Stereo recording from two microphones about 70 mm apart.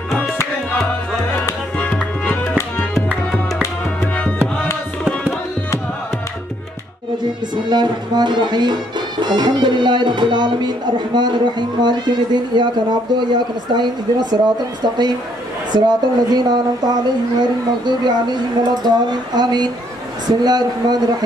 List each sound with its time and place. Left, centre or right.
1.8 s music: centre
7.7 s a woman's voice: right